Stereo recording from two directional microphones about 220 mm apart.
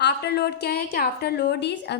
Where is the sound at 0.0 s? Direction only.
50° left (ahead or behind).